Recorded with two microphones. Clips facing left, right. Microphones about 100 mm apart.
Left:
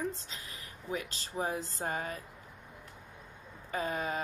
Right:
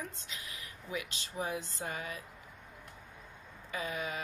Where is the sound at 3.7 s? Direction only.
40° left (ahead or behind).